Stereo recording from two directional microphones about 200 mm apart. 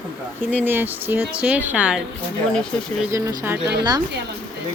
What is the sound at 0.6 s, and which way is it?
Speech, 10° right (ahead or behind).